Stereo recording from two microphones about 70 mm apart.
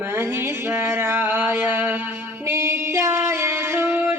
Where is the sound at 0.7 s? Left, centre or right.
Right.